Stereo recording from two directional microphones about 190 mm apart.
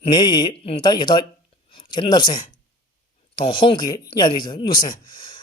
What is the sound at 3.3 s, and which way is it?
Speech, 25° left (ahead or behind).